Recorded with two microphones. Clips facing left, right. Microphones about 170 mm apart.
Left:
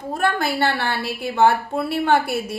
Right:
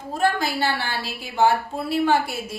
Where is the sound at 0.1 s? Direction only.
60° left (ahead or behind).